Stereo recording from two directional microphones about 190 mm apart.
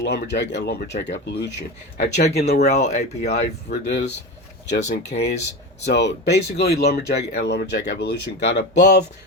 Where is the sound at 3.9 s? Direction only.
65° left (ahead or behind).